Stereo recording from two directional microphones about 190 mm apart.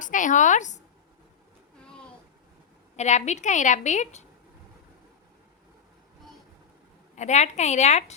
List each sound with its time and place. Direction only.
0.0 s a woman's voice: 40° left (ahead or behind)
2.9 s a woman's voice: 35° left (ahead or behind)
7.2 s a woman's voice: 35° left (ahead or behind)